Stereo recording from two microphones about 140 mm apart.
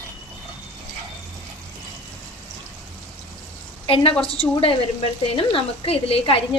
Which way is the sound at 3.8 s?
40° left (ahead or behind).